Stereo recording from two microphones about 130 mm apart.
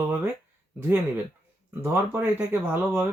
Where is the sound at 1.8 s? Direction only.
15° right (ahead or behind).